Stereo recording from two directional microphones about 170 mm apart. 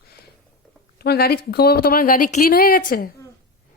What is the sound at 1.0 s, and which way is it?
A woman's voice, 65° left (ahead or behind).